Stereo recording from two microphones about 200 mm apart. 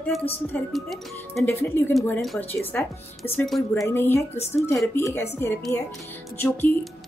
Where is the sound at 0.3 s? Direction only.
5° left (ahead or behind).